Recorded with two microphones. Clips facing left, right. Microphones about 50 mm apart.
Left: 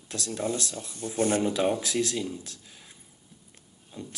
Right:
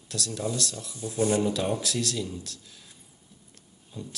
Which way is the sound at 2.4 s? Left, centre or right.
Left.